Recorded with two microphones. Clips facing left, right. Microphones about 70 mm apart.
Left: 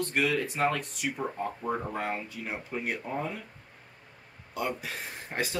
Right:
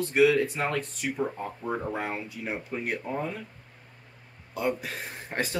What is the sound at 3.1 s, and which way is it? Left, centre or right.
Speech, centre.